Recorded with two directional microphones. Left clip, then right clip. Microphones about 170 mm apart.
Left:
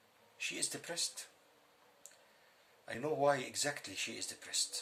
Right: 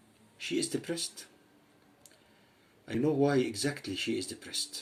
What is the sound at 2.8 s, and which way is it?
Speech, 20° left (ahead or behind).